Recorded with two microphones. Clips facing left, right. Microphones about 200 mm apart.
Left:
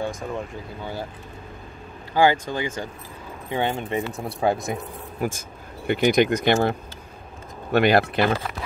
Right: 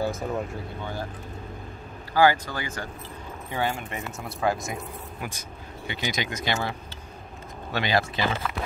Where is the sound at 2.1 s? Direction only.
20° left (ahead or behind).